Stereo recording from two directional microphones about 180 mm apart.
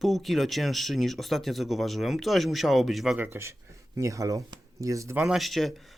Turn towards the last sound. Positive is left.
turn(degrees=0)  # may be behind; listen again after turning